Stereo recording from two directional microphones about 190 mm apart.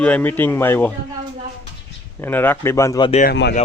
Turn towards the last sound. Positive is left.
turn(degrees=60)  # may be behind; listen again after turning